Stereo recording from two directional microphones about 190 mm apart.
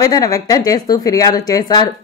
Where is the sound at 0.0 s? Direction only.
20° left (ahead or behind).